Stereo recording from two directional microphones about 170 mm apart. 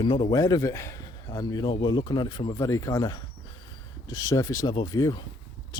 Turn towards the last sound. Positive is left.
turn(degrees=25)  # may be behind; listen again after turning